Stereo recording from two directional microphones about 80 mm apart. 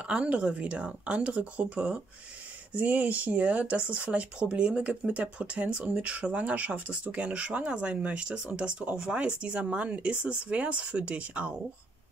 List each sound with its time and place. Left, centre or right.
0.0 s speech: centre